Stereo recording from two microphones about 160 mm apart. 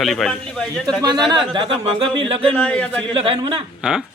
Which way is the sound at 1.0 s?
25° right (ahead or behind).